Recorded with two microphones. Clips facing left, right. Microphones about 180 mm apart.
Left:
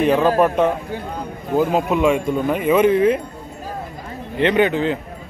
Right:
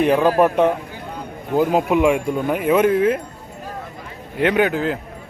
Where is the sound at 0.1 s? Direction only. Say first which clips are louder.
Even; 10° right (ahead or behind).